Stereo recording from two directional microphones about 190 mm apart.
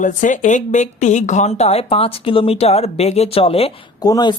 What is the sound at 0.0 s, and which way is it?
Speech, 40° left (ahead or behind).